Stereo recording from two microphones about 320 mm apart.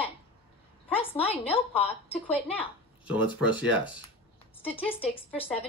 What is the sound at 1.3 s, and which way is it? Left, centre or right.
Speech, centre.